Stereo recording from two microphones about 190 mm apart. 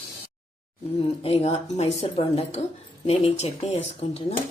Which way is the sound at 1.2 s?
30° left (ahead or behind).